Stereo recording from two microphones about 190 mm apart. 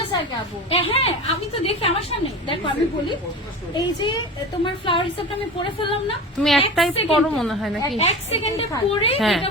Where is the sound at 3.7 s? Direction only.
25° left (ahead or behind).